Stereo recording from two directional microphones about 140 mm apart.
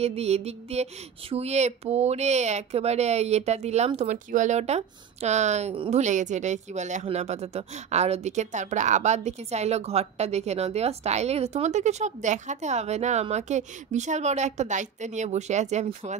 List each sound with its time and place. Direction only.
0.0 s a woman's voice: 50° right (ahead or behind)